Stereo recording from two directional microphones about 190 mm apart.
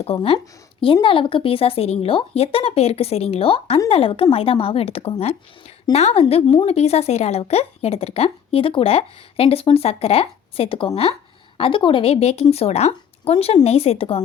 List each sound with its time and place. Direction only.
0.0 s a woman's voice: 30° left (ahead or behind)